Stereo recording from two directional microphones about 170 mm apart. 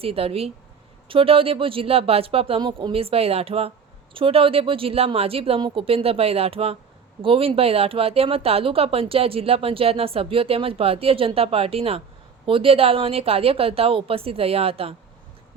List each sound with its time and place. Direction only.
0.0 s speech: 35° right (ahead or behind)